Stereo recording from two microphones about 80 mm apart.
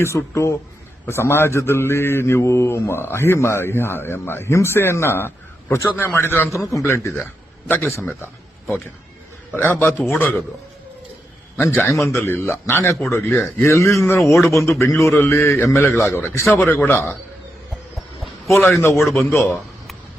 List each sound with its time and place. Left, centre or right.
0.0 s a man's voice: left
6.5 s a man's voice: left
9.6 s a man's voice: left
11.7 s a man's voice: left
14.2 s a man's voice: centre
14.4 s a man's voice: left
15.5 s a man's voice: left
18.5 s a man's voice: left